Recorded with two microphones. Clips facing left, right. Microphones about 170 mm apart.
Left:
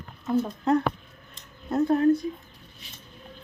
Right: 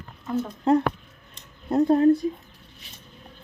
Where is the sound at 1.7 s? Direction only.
30° right (ahead or behind).